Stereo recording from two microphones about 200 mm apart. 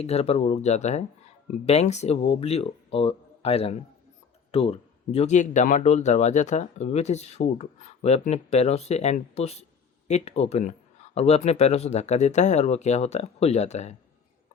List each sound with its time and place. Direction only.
0.0 s speech: 30° left (ahead or behind)